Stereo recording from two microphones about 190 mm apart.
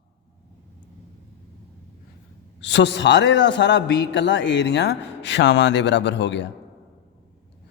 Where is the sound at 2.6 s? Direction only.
65° left (ahead or behind).